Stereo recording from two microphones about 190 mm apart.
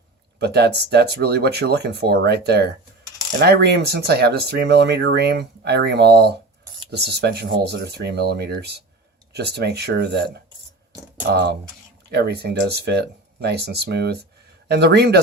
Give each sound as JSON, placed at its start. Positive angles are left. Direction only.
{"t": 0.3, "sound": "speech", "side_deg": -60}